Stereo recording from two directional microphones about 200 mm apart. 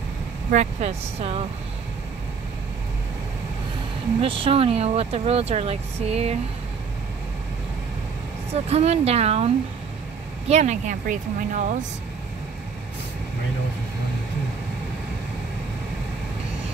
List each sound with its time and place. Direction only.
0.5 s speech: 35° right (ahead or behind)
4.2 s speech: 25° right (ahead or behind)
8.5 s speech: 30° right (ahead or behind)
10.5 s speech: 35° right (ahead or behind)